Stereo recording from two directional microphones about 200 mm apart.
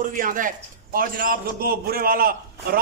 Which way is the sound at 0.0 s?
45° right (ahead or behind).